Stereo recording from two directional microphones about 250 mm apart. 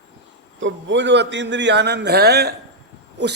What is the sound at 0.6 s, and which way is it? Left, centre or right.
A man's voice, right.